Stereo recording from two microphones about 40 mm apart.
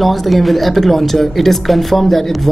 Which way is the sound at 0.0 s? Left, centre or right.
Centre.